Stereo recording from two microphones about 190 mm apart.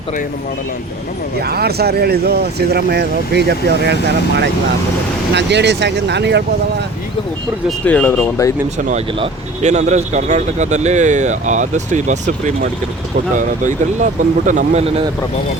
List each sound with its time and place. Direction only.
1.4 s speech: 55° right (ahead or behind)
5.3 s speech: 65° right (ahead or behind)
7.9 s speech: 5° left (ahead or behind)
8.9 s speech: 30° right (ahead or behind)